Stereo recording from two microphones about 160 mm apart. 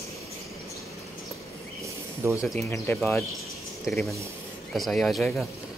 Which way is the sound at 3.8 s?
Centre (ahead or behind).